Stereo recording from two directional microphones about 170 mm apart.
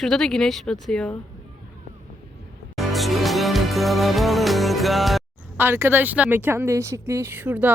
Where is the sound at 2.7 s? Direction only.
Centre (ahead or behind).